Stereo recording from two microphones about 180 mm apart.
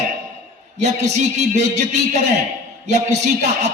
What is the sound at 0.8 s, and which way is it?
A man's voice, 40° right (ahead or behind).